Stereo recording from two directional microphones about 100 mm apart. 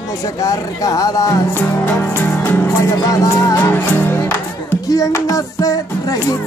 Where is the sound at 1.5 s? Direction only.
20° left (ahead or behind).